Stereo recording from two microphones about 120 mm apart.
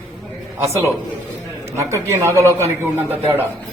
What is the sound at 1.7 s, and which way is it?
Speech, 20° right (ahead or behind).